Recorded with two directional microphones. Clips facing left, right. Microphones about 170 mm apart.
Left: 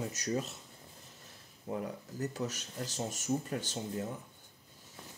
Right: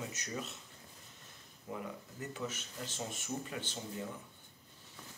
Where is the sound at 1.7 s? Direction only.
40° left (ahead or behind).